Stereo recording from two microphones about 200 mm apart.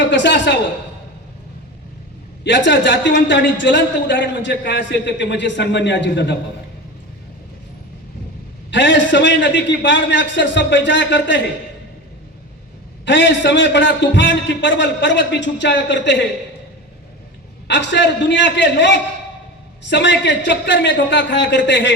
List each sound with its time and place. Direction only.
0.0 s a woman's voice: 60° left (ahead or behind)
2.4 s a man's voice: 60° left (ahead or behind)
8.7 s a man's voice: 65° left (ahead or behind)
13.1 s a man's voice: 65° left (ahead or behind)
17.7 s a man's voice: 60° left (ahead or behind)